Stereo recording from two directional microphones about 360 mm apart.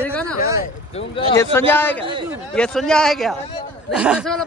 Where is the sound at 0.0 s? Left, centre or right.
Centre.